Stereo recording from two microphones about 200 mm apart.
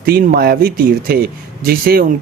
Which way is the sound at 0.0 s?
45° right (ahead or behind).